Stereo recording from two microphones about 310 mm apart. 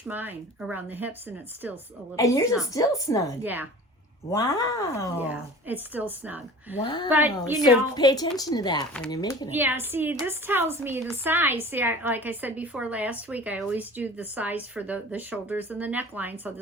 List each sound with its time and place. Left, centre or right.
0.0 s a woman's voice: centre
2.1 s speech: centre
3.4 s a woman's voice: centre
4.3 s speech: centre
5.1 s a woman's voice: centre
6.7 s speech: centre
7.1 s a woman's voice: centre
7.9 s speech: centre
9.5 s a woman's voice: centre